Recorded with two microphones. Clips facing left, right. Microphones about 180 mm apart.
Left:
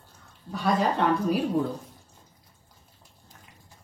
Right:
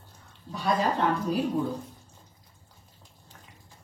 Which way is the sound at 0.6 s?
80° left.